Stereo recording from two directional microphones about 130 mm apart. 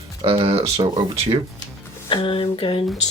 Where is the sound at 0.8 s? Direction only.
30° right (ahead or behind).